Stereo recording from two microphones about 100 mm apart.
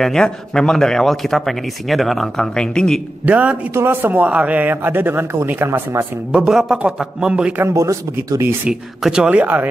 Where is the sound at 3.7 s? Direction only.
25° right (ahead or behind).